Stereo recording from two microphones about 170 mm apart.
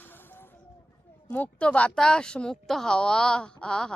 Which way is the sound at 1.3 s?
10° left (ahead or behind).